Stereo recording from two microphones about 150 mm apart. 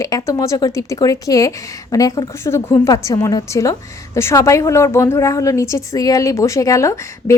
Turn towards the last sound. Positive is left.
turn(degrees=20)  # may be behind; listen again after turning